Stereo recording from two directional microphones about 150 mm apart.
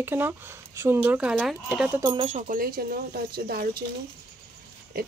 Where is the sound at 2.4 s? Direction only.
70° right (ahead or behind); by 3.8 s 90° right.